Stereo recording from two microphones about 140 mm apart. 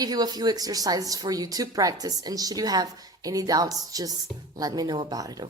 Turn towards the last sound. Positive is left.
turn(degrees=-25)  # may be behind; listen again after turning